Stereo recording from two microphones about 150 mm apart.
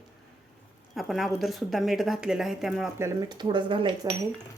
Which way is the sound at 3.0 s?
20° right (ahead or behind).